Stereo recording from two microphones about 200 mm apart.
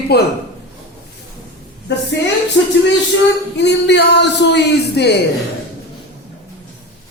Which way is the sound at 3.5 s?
60° left (ahead or behind).